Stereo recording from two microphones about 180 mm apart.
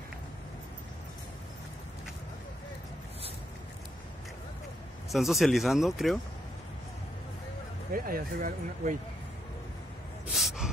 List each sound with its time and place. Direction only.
5.1 s speech: centre (ahead or behind)
7.9 s speech: 55° right (ahead or behind)
10.2 s gasp: centre (ahead or behind)